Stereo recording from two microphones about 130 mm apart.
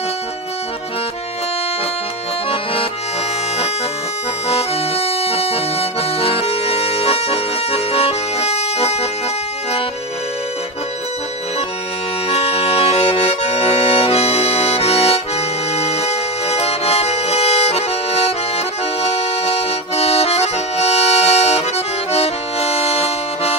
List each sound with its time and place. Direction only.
4.5 s accordion: 50° left (ahead or behind)
12.3 s accordion: 50° left (ahead or behind)